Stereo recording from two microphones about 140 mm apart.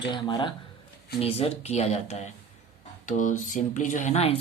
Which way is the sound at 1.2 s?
45° left (ahead or behind).